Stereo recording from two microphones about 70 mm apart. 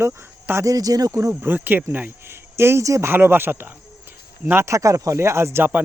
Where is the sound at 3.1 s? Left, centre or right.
Right.